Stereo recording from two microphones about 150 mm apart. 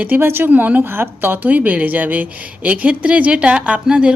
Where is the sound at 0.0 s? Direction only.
15° right (ahead or behind).